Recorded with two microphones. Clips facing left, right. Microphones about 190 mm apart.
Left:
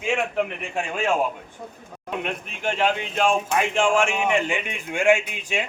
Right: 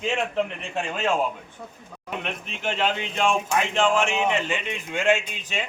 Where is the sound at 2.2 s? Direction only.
10° left (ahead or behind).